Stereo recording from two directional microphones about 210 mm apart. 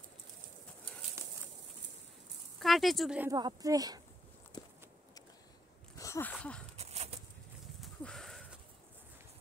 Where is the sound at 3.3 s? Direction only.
20° right (ahead or behind).